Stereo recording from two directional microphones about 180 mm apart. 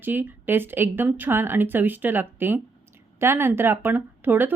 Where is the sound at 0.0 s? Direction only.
10° right (ahead or behind).